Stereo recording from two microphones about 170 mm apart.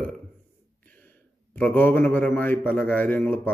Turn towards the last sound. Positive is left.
turn(degrees=10)  # may be behind; listen again after turning